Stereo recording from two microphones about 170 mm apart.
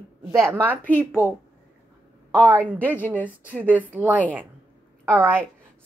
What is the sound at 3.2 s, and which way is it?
A woman's voice, 10° right (ahead or behind).